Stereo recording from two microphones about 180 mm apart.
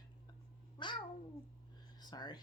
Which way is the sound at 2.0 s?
20° left (ahead or behind).